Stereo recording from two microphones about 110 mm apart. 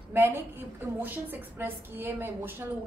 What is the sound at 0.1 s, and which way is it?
A woman's voice, 20° right (ahead or behind).